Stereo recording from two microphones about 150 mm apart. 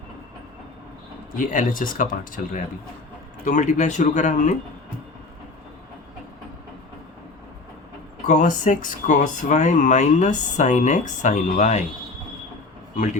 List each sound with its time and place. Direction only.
1.4 s speech: 60° left (ahead or behind)
8.3 s speech: 55° left (ahead or behind)